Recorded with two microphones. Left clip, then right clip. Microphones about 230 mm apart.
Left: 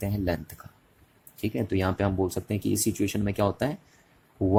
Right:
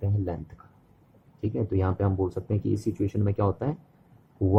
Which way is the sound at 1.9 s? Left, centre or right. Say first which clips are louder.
Left 2 dB; left.